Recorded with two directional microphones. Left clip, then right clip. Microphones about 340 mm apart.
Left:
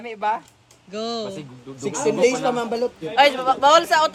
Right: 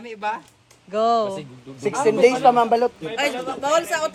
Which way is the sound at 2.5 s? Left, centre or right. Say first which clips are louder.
Right 7 dB; centre.